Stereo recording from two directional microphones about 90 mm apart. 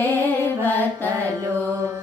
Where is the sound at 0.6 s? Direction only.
20° left (ahead or behind).